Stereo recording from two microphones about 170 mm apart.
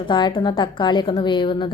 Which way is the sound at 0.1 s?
25° left (ahead or behind).